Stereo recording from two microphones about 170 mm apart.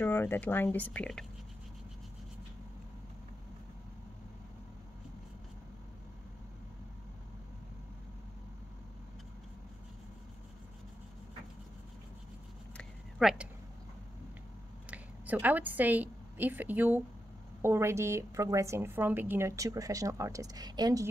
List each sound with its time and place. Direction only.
0.0 s speech: 10° left (ahead or behind)
12.7 s a sound: centre (ahead or behind)
14.9 s a woman's voice: 10° right (ahead or behind)